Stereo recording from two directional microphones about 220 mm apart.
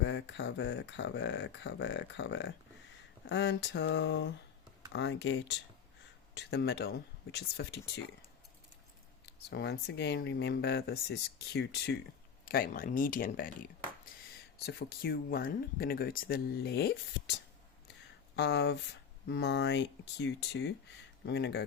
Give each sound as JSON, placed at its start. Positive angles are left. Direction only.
{"t": 0.0, "sound": "speech", "side_deg": 55}
{"t": 9.2, "sound": "speech", "side_deg": 50}